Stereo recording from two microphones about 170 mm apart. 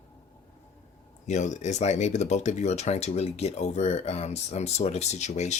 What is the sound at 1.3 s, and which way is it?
Speech, 45° left (ahead or behind).